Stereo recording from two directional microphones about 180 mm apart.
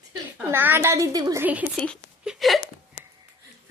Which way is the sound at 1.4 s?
10° right (ahead or behind).